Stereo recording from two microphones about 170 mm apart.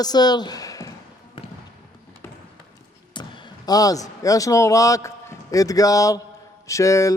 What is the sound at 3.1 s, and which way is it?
A man's voice, 25° left (ahead or behind).